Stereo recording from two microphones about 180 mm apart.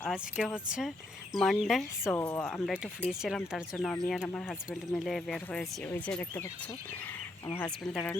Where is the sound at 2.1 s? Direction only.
10° left (ahead or behind).